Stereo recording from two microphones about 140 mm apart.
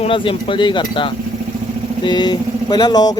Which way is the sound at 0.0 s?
40° left (ahead or behind).